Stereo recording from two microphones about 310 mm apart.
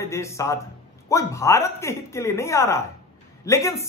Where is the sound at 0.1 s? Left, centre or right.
Centre.